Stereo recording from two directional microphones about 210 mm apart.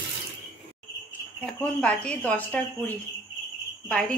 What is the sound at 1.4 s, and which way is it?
Speech, 5° left (ahead or behind).